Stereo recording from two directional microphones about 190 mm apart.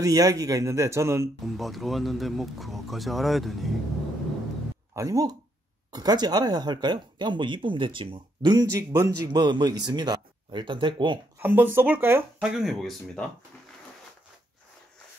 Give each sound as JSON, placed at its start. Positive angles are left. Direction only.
{"t": 0.0, "sound": "speech", "side_deg": -20}
{"t": 1.4, "sound": "speech", "side_deg": 0}
{"t": 4.9, "sound": "speech", "side_deg": -20}
{"t": 11.3, "sound": "speech", "side_deg": -10}